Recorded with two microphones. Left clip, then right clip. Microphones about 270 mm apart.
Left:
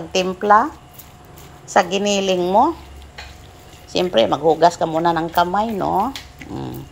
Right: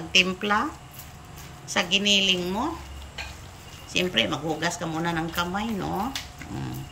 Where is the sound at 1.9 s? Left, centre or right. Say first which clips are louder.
Left 3 dB; centre.